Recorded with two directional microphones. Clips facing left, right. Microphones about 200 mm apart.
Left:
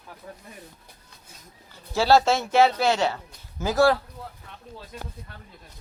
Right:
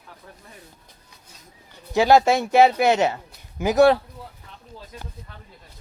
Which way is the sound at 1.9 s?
15° right (ahead or behind).